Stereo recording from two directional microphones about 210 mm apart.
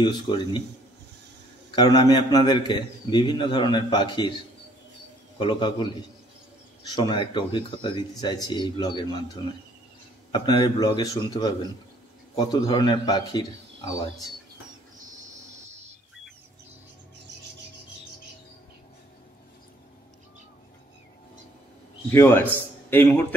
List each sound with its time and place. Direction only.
0.0 s a man's voice: 25° left (ahead or behind)
1.8 s a man's voice: 20° left (ahead or behind)
5.4 s a man's voice: 25° left (ahead or behind)
6.9 s a man's voice: 20° left (ahead or behind)
10.3 s a man's voice: 20° left (ahead or behind)
22.1 s a man's voice: 10° left (ahead or behind)